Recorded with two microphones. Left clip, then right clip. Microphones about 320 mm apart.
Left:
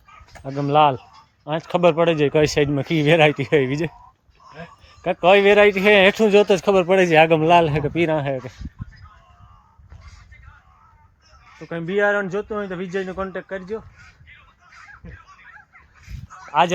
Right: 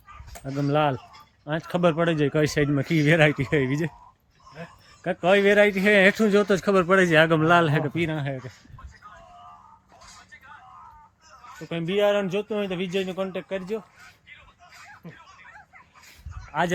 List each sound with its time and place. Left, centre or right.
0.3 s speech: centre
1.5 s speech: centre
5.0 s speech: centre
11.9 s speech: centre
14.7 s a sound: centre